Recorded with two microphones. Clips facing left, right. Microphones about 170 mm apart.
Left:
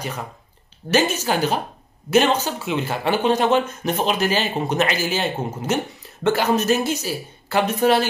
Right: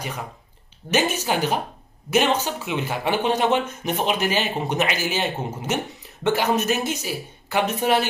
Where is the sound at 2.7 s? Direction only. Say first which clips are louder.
Left 2 dB; 15° right (ahead or behind).